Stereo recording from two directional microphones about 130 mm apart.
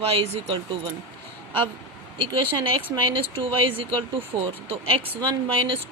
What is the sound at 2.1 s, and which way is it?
A woman's voice, 40° right (ahead or behind).